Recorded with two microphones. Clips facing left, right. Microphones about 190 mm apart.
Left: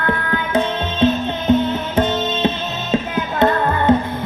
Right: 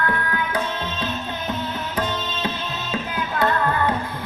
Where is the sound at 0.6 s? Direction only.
25° left (ahead or behind).